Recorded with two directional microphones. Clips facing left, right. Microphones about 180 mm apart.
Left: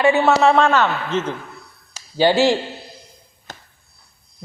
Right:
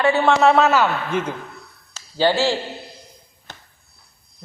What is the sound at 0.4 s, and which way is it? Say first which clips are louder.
Speech: even; 5° right (ahead or behind).